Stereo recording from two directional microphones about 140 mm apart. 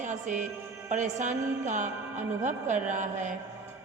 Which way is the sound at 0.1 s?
60° right (ahead or behind).